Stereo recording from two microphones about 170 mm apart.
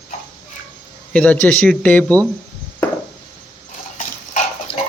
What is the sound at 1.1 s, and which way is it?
Speech, 5° left (ahead or behind).